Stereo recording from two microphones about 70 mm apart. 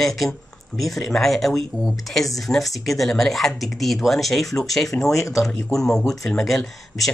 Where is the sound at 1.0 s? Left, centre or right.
Centre.